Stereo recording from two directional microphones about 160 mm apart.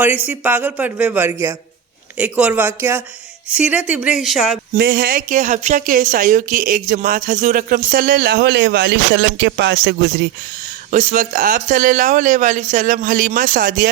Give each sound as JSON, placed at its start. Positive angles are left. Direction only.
{"t": 0.3, "sound": "speech", "side_deg": -10}
{"t": 4.8, "sound": "a woman's voice", "side_deg": -75}
{"t": 10.9, "sound": "a woman's voice", "side_deg": -50}